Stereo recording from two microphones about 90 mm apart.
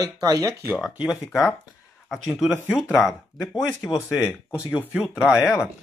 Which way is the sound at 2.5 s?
25° left (ahead or behind).